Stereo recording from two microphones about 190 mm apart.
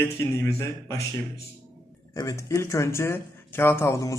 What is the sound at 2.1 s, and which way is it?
A man's voice, 15° left (ahead or behind).